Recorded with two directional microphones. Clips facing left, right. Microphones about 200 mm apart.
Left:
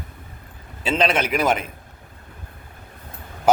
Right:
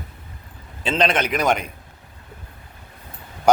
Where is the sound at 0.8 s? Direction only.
5° left (ahead or behind).